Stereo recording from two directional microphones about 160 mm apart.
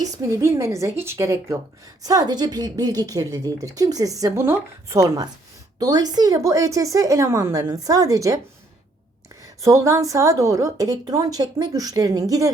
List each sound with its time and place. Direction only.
0.0 s a woman's voice: 20° right (ahead or behind)
9.6 s a woman's voice: 20° right (ahead or behind)